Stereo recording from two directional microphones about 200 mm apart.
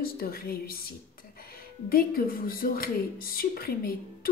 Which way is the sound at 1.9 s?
45° left (ahead or behind).